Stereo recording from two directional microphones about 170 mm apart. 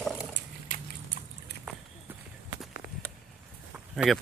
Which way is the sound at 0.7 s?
50° left (ahead or behind).